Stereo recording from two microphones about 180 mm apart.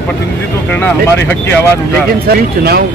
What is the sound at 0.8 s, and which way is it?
Speech, 10° left (ahead or behind).